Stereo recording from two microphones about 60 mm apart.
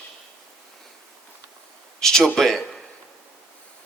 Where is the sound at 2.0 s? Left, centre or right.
Centre.